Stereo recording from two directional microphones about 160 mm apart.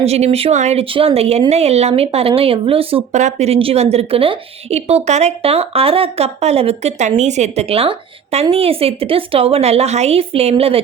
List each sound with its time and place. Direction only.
0.0 s speech: 40° right (ahead or behind)